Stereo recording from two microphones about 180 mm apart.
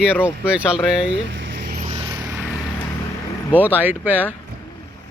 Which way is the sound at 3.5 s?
10° right (ahead or behind).